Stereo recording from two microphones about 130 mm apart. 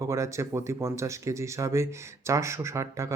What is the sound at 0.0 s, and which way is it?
Speech, 25° right (ahead or behind).